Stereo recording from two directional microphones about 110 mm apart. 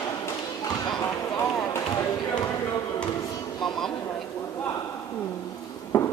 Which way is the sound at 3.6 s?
5° left (ahead or behind).